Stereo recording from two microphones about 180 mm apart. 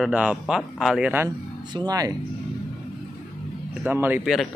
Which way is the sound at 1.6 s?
25° right (ahead or behind).